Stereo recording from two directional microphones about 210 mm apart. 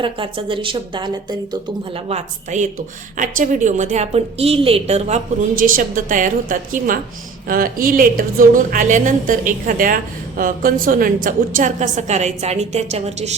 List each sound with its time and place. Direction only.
0.0 s a woman's voice: 25° right (ahead or behind)
2.0 s speech: 35° right (ahead or behind)